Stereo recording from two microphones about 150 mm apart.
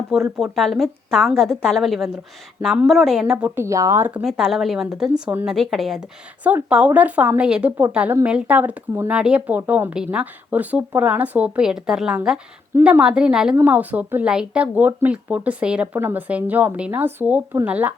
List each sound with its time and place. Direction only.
0.1 s a woman's voice: centre (ahead or behind)
3.3 s speech: 15° right (ahead or behind)
4.2 s a woman's voice: centre (ahead or behind)